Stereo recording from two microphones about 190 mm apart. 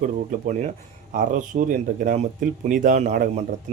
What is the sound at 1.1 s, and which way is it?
Speech, 45° right (ahead or behind).